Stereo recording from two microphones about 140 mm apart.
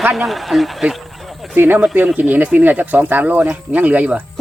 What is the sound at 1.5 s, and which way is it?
Speech, 15° right (ahead or behind).